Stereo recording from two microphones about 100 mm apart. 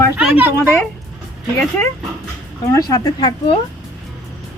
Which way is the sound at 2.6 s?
35° left (ahead or behind).